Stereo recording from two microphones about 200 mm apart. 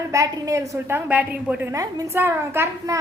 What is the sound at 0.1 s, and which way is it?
A woman's voice, 15° right (ahead or behind).